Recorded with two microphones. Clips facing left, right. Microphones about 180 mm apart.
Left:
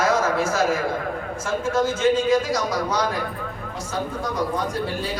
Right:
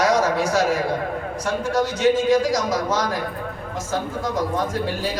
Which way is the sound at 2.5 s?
45° right (ahead or behind).